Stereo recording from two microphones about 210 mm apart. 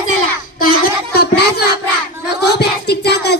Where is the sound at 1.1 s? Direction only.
50° left (ahead or behind).